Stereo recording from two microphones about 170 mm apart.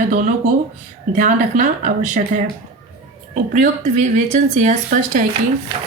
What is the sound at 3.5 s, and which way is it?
Speech, 45° right (ahead or behind).